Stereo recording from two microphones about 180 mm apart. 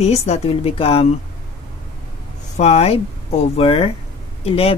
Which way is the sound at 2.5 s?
40° left (ahead or behind).